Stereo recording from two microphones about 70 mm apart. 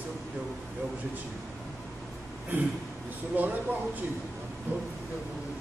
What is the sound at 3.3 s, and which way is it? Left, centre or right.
Speech, right.